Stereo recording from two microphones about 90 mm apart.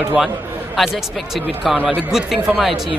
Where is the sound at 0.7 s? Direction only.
Centre (ahead or behind).